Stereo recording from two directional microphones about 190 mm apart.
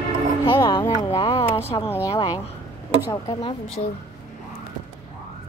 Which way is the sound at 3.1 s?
20° left (ahead or behind).